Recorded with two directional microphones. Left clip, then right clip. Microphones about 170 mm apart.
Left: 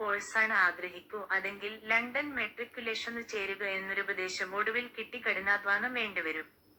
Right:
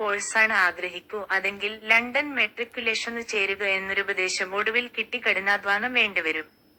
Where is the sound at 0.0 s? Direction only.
35° right (ahead or behind).